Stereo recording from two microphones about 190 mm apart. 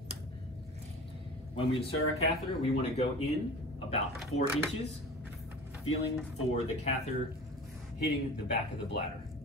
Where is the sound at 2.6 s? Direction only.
35° left (ahead or behind).